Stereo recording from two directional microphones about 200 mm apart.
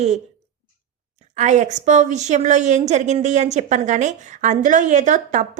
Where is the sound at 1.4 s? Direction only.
35° right (ahead or behind).